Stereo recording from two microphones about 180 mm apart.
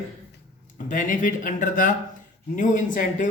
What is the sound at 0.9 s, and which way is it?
A man's voice, 45° left (ahead or behind).